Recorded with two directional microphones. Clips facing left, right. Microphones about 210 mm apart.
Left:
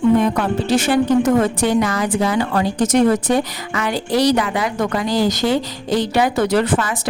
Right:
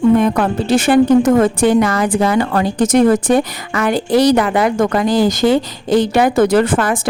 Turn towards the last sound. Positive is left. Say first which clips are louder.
# right 4 dB
turn(degrees=-50)  # may be behind; listen again after turning